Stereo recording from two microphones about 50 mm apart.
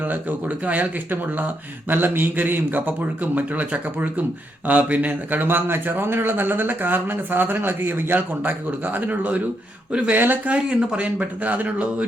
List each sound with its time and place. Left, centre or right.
0.0 s a man's voice: right
10.5 s speech: right